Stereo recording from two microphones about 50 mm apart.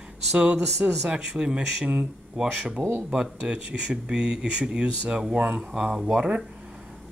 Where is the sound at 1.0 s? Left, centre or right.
Centre.